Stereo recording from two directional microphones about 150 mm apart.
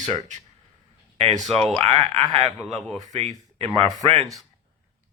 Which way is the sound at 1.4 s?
Centre (ahead or behind).